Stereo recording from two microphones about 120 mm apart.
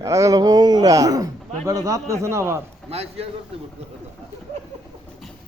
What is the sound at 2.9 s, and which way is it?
Speech, 55° right (ahead or behind).